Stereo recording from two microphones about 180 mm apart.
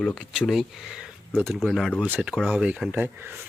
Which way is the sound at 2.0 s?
10° right (ahead or behind).